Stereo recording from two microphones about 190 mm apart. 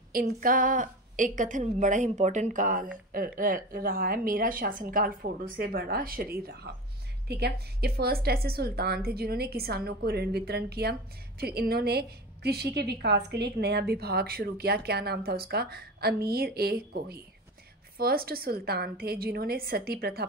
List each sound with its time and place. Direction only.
0.1 s a woman's voice: 50° right (ahead or behind)